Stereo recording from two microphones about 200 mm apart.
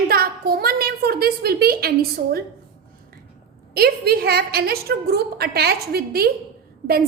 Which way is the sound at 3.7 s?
50° right (ahead or behind).